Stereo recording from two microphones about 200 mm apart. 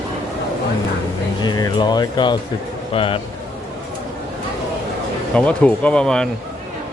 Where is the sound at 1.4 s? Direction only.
20° left (ahead or behind).